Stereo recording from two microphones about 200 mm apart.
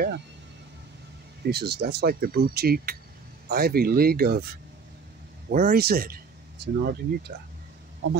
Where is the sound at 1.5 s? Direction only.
55° right (ahead or behind).